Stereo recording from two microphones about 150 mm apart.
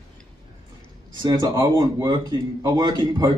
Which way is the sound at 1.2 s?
30° right (ahead or behind).